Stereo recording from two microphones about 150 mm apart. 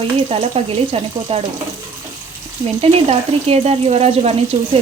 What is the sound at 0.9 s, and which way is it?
Speech, 40° right (ahead or behind).